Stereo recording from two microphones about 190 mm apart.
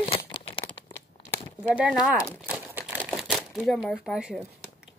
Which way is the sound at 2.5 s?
5° right (ahead or behind).